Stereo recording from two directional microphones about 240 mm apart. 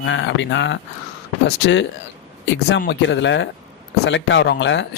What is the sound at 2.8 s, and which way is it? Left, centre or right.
Speech, left.